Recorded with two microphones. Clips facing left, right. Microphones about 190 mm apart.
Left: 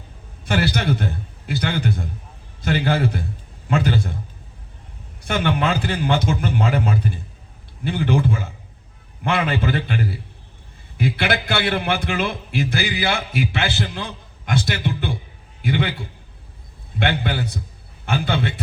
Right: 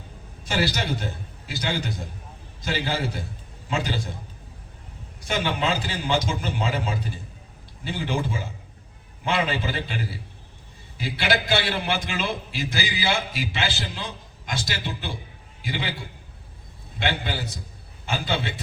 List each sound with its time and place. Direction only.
0.4 s a man's voice: 55° left (ahead or behind)
5.2 s a man's voice: 60° left (ahead or behind)
17.0 s a man's voice: 55° left (ahead or behind)